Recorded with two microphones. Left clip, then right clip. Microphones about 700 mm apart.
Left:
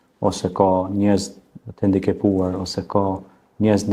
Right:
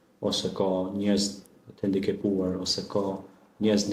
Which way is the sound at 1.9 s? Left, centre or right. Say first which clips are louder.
Left 7 dB; left.